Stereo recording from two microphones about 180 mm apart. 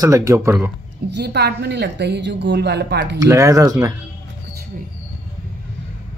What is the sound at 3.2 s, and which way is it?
Speech, 20° right (ahead or behind).